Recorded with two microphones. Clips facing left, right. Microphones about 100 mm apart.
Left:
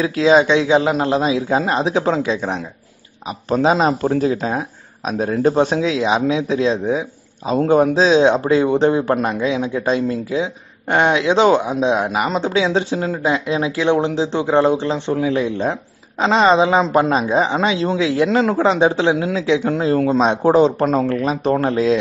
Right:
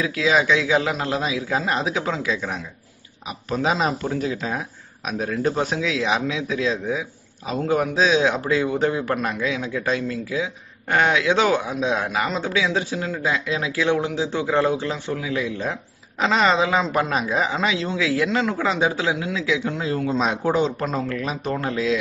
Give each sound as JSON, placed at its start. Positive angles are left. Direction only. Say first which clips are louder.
{"t": 0.0, "sound": "speech", "louder": "left 7 dB", "side_deg": 30}
{"t": 20.2, "sound": "speech", "louder": "left 7 dB", "side_deg": 35}
{"t": 20.8, "sound": "speech", "louder": "left 8 dB", "side_deg": 55}
{"t": 21.1, "sound": "speech", "louder": "left 8 dB", "side_deg": 35}